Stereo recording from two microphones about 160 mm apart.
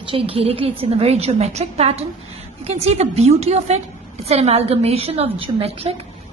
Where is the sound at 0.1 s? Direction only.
35° right (ahead or behind).